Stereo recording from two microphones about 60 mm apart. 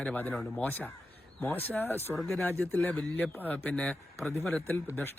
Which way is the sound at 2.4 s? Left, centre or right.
Left.